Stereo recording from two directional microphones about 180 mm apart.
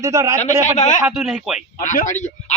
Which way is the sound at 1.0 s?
Centre (ahead or behind).